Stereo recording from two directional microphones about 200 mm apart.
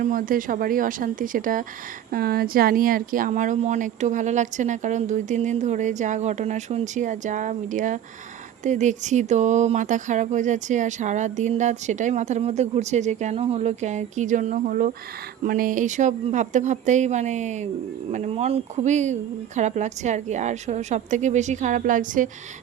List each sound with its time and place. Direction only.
0.0 s speech: 45° right (ahead or behind)